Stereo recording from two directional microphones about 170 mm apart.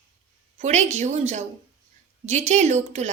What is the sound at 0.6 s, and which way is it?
A woman's voice, 40° right (ahead or behind).